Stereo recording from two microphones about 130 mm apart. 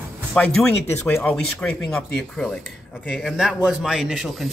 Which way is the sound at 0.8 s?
20° left (ahead or behind).